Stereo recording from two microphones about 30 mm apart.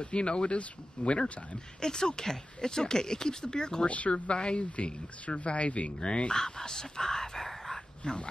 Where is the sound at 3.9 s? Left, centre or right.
Left.